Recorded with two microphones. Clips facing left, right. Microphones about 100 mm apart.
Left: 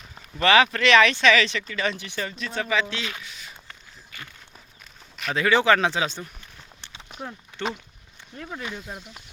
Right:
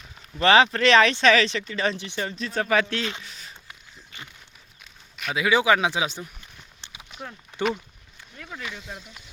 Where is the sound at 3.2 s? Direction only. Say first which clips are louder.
Left 1 dB; 35° right (ahead or behind).